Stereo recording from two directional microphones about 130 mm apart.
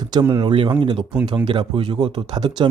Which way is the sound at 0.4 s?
40° right (ahead or behind).